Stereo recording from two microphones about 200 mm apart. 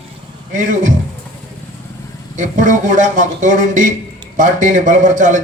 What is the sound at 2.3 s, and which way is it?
A man's voice, 40° right (ahead or behind).